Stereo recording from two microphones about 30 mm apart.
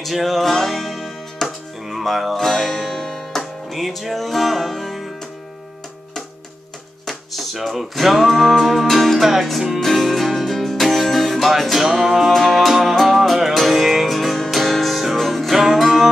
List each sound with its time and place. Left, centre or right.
0.1 s music: centre
1.4 s music: centre
1.9 s music: centre
2.3 s music: centre
3.7 s music: centre
7.9 s music: centre
8.8 s music: centre
9.2 s music: centre
9.8 s music: centre